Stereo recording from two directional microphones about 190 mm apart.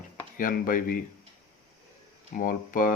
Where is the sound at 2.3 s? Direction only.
45° left (ahead or behind).